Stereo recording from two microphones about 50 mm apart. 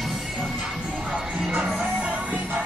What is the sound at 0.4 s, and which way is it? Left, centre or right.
Music, centre.